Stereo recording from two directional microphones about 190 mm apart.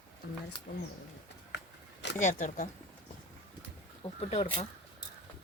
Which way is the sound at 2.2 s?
40° left (ahead or behind).